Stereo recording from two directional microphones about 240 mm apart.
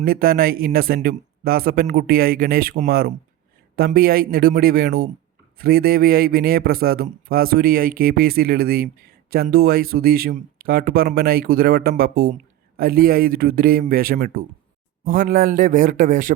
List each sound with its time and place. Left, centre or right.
0.0 s speech: right